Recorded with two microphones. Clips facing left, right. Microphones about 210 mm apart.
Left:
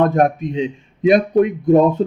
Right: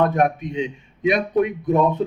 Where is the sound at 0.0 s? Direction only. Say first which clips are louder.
Left 4 dB; 45° left (ahead or behind).